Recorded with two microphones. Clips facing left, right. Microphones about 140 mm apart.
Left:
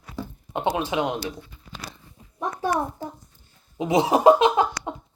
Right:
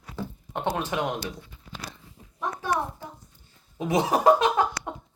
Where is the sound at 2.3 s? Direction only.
35° left (ahead or behind).